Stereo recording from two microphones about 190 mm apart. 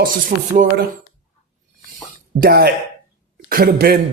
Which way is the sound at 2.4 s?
55° right (ahead or behind).